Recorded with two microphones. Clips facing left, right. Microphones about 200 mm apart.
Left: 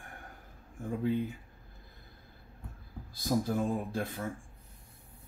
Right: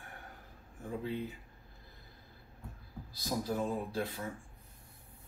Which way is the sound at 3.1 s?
50° left (ahead or behind).